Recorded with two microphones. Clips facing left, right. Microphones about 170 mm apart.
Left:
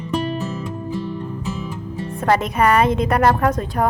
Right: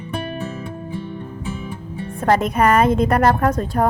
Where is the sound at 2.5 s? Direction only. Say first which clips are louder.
Right 1 dB; 45° right (ahead or behind).